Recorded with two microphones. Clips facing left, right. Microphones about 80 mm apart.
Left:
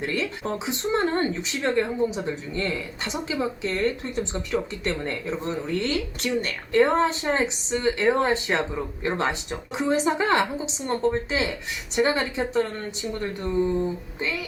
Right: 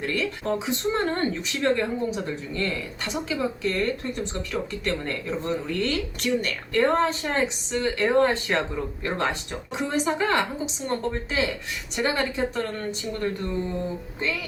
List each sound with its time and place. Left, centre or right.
0.0 s speech: left